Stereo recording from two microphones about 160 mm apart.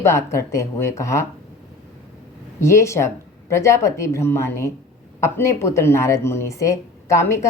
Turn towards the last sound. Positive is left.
turn(degrees=20)  # may be behind; listen again after turning